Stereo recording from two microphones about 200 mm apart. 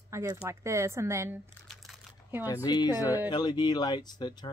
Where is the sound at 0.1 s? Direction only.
15° right (ahead or behind).